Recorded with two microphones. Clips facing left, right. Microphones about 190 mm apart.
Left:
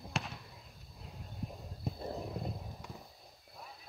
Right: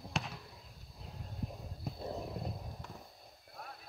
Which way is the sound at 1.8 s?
Centre (ahead or behind).